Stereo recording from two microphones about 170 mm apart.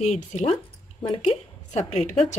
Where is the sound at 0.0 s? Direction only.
45° left (ahead or behind).